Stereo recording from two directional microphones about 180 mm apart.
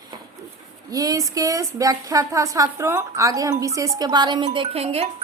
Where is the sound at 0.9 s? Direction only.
20° right (ahead or behind).